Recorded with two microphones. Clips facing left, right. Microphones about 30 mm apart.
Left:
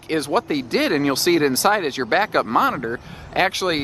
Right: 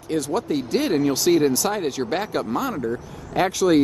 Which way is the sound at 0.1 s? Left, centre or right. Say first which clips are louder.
Left 2 dB; left.